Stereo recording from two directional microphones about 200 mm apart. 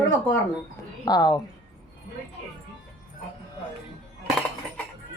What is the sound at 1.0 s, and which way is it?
Speech, 20° left (ahead or behind).